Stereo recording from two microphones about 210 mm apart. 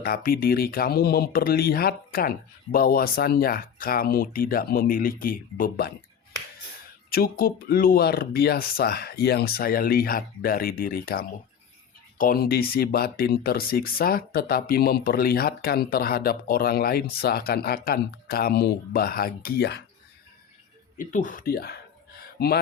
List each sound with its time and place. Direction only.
0.0 s speech: 45° left (ahead or behind)
7.1 s speech: 45° left (ahead or behind)
21.0 s speech: 40° left (ahead or behind)